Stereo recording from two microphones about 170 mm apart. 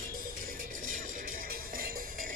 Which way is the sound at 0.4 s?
50° right (ahead or behind).